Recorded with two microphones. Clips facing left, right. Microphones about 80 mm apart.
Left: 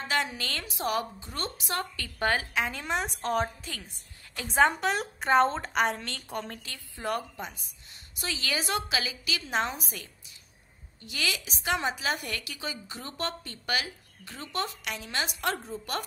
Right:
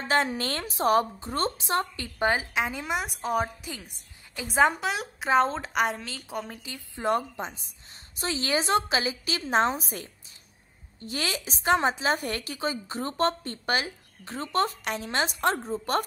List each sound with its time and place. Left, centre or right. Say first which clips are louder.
0.1 s a woman's voice: right 5 dB; right; by 2.8 s centre
2.8 s a woman's voice: right 1 dB; centre
6.6 s a woman's voice: right 5 dB; right